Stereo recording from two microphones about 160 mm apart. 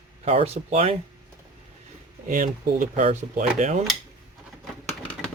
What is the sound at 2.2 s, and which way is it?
Speech, 55° right (ahead or behind).